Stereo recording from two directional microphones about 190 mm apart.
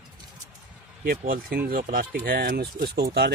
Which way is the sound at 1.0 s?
50° right (ahead or behind).